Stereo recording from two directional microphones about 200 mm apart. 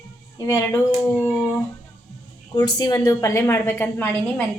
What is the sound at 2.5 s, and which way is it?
A woman's voice, 20° left (ahead or behind).